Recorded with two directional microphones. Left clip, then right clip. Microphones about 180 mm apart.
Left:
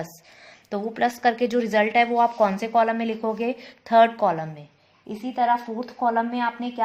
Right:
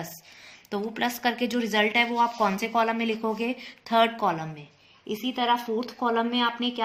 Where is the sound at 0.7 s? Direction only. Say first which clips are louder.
Left 4 dB; 45° left (ahead or behind).